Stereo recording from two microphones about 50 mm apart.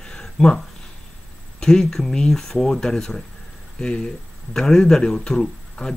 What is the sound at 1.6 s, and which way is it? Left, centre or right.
Speech, centre.